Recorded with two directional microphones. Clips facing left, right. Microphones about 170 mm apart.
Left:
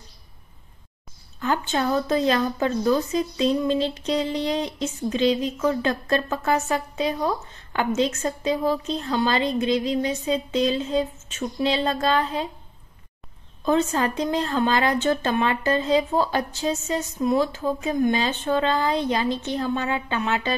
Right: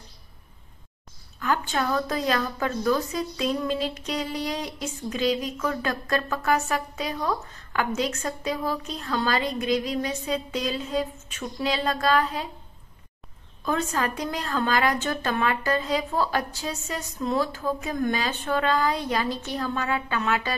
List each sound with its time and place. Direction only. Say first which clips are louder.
1.4 s a woman's voice: left 2 dB; 25° left (ahead or behind)
13.7 s a woman's voice: left 5 dB; 25° left (ahead or behind)